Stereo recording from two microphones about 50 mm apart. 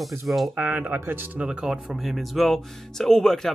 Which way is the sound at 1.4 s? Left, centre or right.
Centre.